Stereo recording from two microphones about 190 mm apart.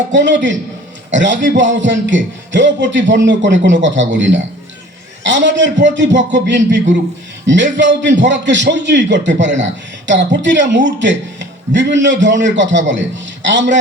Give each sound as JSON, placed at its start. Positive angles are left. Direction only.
{"t": 0.1, "sound": "a man's voice", "side_deg": -70}